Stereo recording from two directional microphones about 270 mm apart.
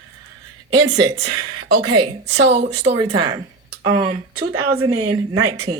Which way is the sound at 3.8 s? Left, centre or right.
Right.